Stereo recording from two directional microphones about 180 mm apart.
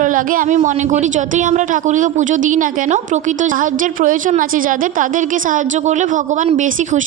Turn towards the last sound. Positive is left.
turn(degrees=-45)  # may be behind; listen again after turning